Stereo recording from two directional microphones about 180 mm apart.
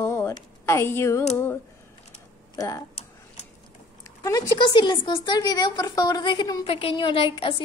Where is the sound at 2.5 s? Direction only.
20° left (ahead or behind).